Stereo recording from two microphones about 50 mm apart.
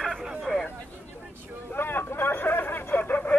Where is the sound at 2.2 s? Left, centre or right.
Left.